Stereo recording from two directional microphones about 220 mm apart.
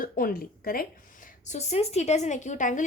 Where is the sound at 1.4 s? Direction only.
30° left (ahead or behind).